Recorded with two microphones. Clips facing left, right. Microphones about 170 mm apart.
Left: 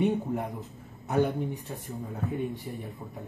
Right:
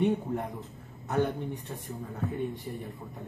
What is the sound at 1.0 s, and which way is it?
Speech, 10° left (ahead or behind).